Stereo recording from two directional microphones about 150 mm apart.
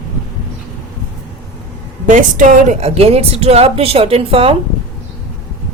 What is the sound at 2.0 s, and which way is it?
A woman's voice, 60° right (ahead or behind).